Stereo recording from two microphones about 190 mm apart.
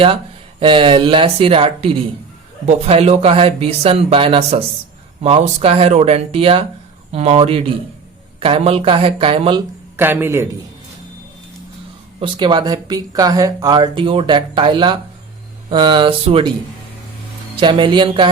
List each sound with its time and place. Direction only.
0.6 s speech: 25° right (ahead or behind)
10.0 s a man's voice: 10° right (ahead or behind)
12.2 s speech: 25° right (ahead or behind)
17.6 s speech: 25° right (ahead or behind)